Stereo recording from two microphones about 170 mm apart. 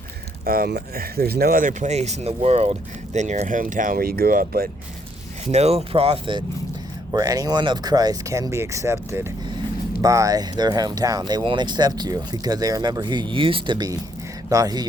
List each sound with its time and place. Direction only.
0.4 s speech: 60° right (ahead or behind)
5.5 s speech: 40° right (ahead or behind)
7.1 s speech: 20° right (ahead or behind)